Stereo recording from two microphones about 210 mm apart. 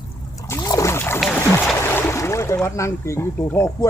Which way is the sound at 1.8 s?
10° left (ahead or behind).